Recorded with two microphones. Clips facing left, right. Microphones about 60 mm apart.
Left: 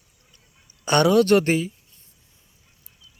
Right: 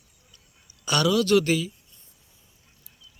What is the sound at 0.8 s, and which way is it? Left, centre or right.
Speech, left.